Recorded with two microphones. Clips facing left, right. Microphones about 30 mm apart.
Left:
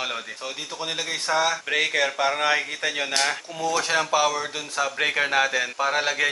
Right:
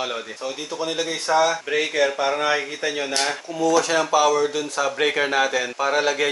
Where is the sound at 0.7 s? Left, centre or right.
Centre.